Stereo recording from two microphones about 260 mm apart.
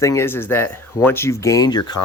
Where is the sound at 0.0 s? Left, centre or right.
Centre.